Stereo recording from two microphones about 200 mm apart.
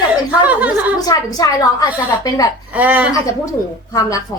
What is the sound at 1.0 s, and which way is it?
A woman's voice, 20° left (ahead or behind).